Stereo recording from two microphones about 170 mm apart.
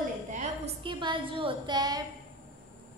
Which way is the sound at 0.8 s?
30° right (ahead or behind).